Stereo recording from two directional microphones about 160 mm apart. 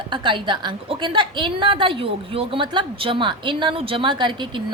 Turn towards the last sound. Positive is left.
turn(degrees=-30)  # may be behind; listen again after turning